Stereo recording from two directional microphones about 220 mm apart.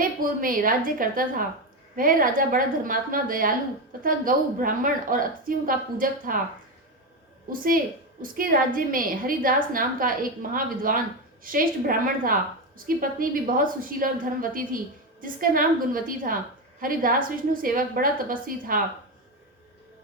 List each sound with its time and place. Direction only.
0.2 s a woman's voice: 40° right (ahead or behind)
7.5 s a woman's voice: 40° right (ahead or behind)
15.2 s a woman's voice: 40° right (ahead or behind)